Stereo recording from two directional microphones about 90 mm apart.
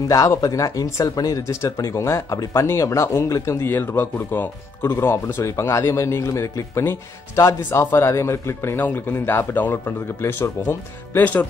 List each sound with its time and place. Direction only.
0.1 s speech: 40° left (ahead or behind); by 11.4 s 20° left (ahead or behind)